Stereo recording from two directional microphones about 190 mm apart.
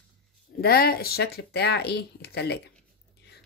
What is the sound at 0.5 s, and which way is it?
Speech, 55° left (ahead or behind).